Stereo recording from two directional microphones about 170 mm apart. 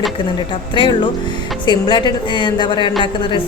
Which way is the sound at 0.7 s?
30° left (ahead or behind).